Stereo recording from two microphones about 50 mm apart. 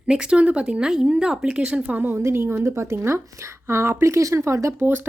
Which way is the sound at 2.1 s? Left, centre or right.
Right.